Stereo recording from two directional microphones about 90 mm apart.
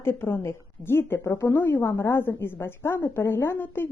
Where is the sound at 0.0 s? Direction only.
25° left (ahead or behind).